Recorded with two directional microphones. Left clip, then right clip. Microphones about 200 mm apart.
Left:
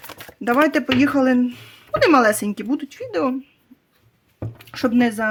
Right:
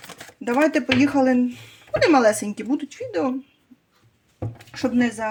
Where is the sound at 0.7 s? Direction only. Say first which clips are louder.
Left 1 dB; 30° left (ahead or behind).